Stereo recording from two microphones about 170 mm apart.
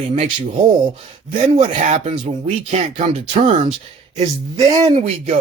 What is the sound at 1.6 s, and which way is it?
Speech, 45° right (ahead or behind).